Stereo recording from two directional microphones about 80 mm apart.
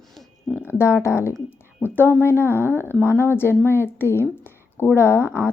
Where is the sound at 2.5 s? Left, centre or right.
Right.